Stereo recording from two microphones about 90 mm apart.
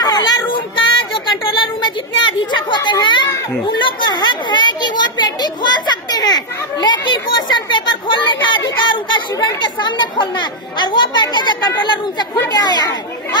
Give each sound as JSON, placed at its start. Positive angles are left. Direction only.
{"t": 0.0, "sound": "child singing", "side_deg": 50}
{"t": 0.7, "sound": "child singing", "side_deg": 70}
{"t": 2.5, "sound": "chatter", "side_deg": 60}
{"t": 4.1, "sound": "children playing", "side_deg": 55}
{"t": 9.3, "sound": "speech", "side_deg": 60}